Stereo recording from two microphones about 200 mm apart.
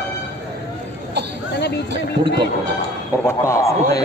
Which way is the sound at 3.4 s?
15° left (ahead or behind).